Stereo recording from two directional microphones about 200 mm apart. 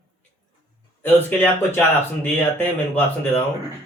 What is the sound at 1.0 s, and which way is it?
Speech, 10° left (ahead or behind).